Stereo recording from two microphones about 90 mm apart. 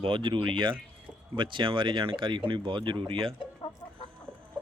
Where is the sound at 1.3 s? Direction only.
65° right (ahead or behind).